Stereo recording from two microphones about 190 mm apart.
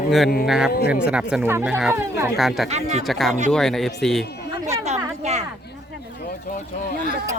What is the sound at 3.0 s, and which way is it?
Speech, centre (ahead or behind).